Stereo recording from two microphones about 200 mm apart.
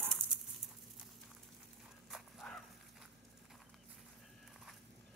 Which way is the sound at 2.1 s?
Centre (ahead or behind).